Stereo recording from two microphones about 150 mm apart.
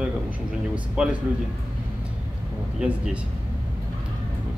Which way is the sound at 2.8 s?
5° right (ahead or behind).